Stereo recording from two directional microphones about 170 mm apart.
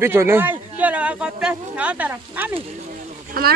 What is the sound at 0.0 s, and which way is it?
Speech, 15° right (ahead or behind).